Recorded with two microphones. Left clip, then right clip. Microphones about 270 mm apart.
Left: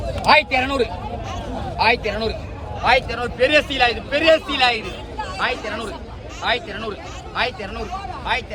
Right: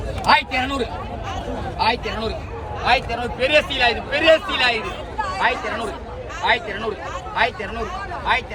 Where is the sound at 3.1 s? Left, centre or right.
Left.